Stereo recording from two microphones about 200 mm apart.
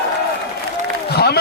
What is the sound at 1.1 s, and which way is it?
Speech, 55° left (ahead or behind).